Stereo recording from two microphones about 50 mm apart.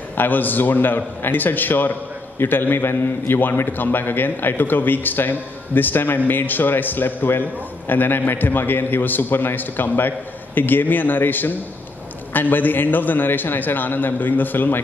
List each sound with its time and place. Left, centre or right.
0.2 s a man's voice: left